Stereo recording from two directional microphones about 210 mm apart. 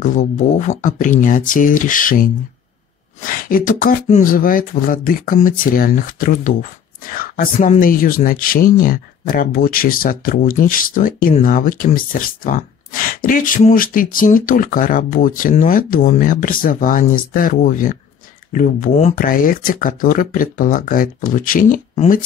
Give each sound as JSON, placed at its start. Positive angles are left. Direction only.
{"t": 0.0, "sound": "speech", "side_deg": 35}